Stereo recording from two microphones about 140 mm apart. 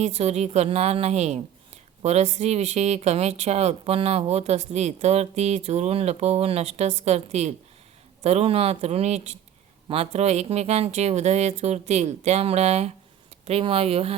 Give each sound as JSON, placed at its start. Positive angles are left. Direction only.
{"t": 0.0, "sound": "speech", "side_deg": -50}